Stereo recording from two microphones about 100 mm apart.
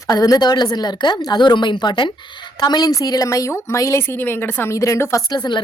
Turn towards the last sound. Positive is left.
turn(degrees=45)  # may be behind; listen again after turning